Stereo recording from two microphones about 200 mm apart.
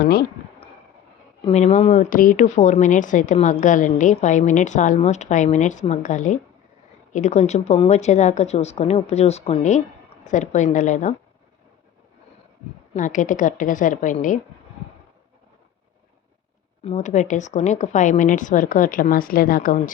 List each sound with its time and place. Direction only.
0.0 s speech: 50° left (ahead or behind)
1.5 s a woman's voice: 35° left (ahead or behind)
12.9 s a woman's voice: 40° left (ahead or behind)
16.8 s a woman's voice: 35° left (ahead or behind)